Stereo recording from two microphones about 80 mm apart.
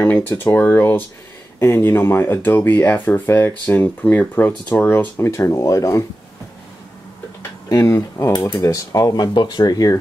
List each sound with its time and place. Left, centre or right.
0.0 s speech: left
7.7 s speech: left
8.5 s speech: left